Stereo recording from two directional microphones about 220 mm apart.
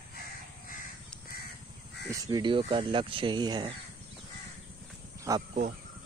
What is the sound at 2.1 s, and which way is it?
Speech, 15° right (ahead or behind).